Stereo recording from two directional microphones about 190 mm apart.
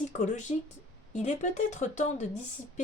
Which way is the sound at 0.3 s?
40° left (ahead or behind).